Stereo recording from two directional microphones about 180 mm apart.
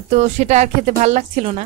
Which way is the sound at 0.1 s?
40° right (ahead or behind).